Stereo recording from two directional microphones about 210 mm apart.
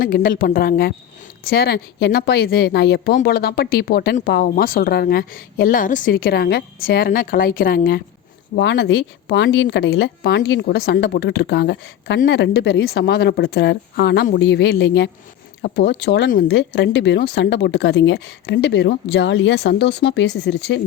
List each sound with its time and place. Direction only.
0.0 s speech: 45° left (ahead or behind)
8.5 s a woman's voice: 55° left (ahead or behind)